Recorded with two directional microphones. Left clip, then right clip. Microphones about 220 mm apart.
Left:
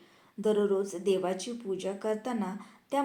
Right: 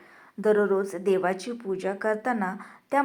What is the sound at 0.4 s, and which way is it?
A woman's voice, 20° right (ahead or behind).